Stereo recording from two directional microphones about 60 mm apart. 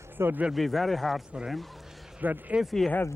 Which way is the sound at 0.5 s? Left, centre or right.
Centre.